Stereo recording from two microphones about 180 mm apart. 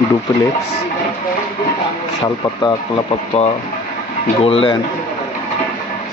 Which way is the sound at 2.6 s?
25° left (ahead or behind).